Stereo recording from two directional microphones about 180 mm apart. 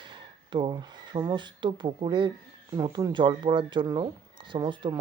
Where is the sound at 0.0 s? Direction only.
25° right (ahead or behind).